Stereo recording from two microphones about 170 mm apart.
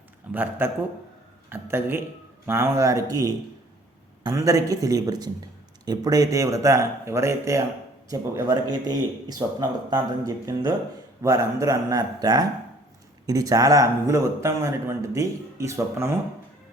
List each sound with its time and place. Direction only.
0.3 s a man's voice: 10° right (ahead or behind)